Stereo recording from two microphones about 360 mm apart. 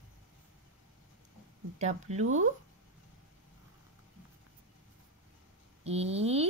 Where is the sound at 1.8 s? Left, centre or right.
Centre.